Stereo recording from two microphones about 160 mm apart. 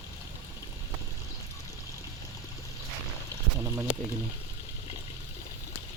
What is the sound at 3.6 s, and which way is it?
Speech, 20° right (ahead or behind).